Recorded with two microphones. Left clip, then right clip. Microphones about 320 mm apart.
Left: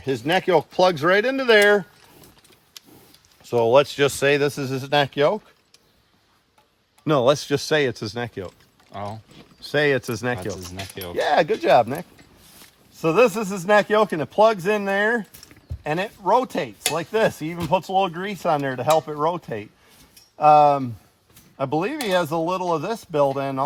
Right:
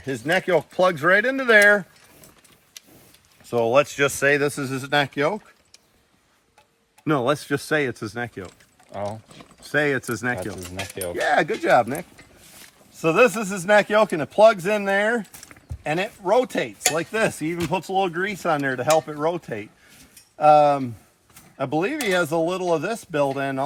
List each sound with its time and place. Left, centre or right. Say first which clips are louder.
0.0 s speech: left 1 dB; left
3.5 s speech: left 2 dB; left
7.0 s speech: left 4 dB; left
8.9 s speech: right 3 dB; centre
9.7 s speech: left 2 dB; left
10.3 s speech: even; centre
11.2 s speech: left 2 dB; left
21.9 s speech: even; centre
22.4 s speech: even; left